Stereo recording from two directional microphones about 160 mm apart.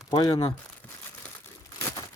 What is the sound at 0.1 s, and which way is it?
Speech, 25° left (ahead or behind).